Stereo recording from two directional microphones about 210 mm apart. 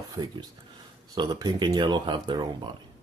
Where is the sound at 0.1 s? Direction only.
20° right (ahead or behind).